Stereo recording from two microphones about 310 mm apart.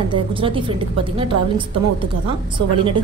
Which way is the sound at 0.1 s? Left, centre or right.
Centre.